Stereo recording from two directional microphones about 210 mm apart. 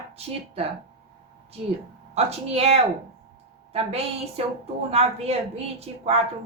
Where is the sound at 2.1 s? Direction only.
30° right (ahead or behind).